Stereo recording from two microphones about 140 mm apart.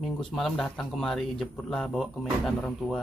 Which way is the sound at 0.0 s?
Centre (ahead or behind).